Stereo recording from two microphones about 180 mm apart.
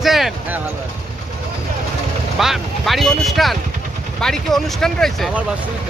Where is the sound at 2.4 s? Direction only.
Centre (ahead or behind).